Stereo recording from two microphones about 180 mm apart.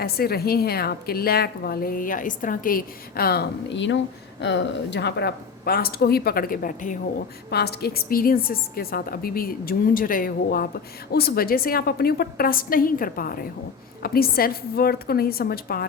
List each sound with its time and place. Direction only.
0.0 s a woman's voice: 60° left (ahead or behind)
7.5 s a woman's voice: 60° left (ahead or behind)